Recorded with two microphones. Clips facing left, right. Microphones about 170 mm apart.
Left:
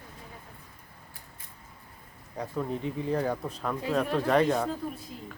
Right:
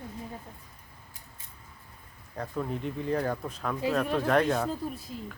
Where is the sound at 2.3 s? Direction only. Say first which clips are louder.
Left 1 dB; 10° left (ahead or behind).